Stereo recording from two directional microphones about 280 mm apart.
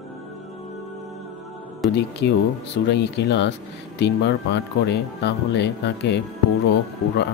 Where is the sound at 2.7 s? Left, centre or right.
Left.